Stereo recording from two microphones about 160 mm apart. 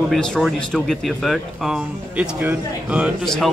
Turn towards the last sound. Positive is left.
turn(degrees=0)  # may be behind; listen again after turning